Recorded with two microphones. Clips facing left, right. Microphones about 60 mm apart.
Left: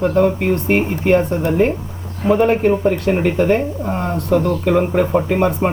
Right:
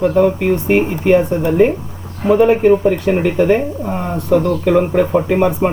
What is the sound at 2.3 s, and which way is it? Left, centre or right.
Speech, centre.